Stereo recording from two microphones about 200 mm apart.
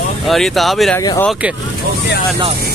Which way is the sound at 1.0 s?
15° left (ahead or behind).